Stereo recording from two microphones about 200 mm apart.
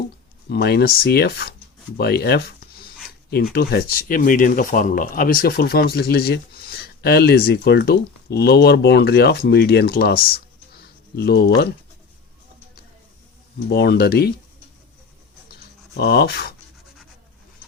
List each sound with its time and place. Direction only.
0.4 s speech: 55° left (ahead or behind)
11.2 s speech: 55° left (ahead or behind)
13.7 s speech: 55° left (ahead or behind)
16.0 s speech: 55° left (ahead or behind)